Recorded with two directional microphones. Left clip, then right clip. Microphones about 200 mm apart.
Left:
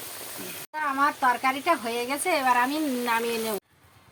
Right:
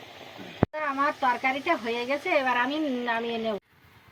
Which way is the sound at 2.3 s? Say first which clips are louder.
Left 2 dB; 40° left (ahead or behind).